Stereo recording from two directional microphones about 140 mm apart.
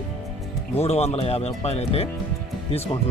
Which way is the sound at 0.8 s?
45° left (ahead or behind).